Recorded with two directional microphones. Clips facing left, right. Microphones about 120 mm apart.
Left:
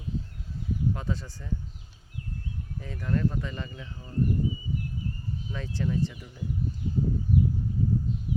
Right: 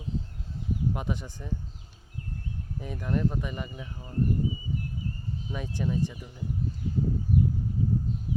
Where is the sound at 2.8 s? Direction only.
15° right (ahead or behind).